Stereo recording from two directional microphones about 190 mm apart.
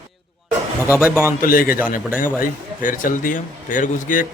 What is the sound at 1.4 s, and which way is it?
A man's voice, 50° left (ahead or behind).